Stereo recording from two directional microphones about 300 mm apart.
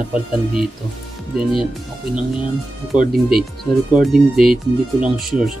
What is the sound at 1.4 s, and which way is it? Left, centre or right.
Speech, centre.